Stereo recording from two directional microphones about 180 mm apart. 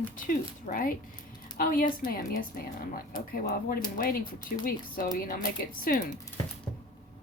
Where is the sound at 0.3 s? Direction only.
50° left (ahead or behind).